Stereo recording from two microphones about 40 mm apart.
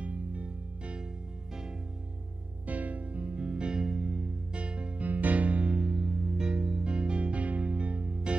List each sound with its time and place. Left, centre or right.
0.0 s music: right
2.6 s music: right
3.8 s music: centre
4.6 s music: right
5.0 s music: right
8.1 s music: right